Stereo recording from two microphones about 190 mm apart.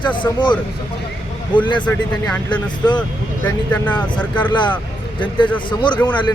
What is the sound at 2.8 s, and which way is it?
Speech, 25° left (ahead or behind).